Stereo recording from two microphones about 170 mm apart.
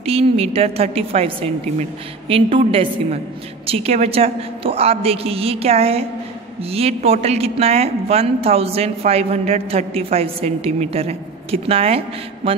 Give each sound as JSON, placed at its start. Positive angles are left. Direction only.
{"t": 0.0, "sound": "a woman's voice", "side_deg": -35}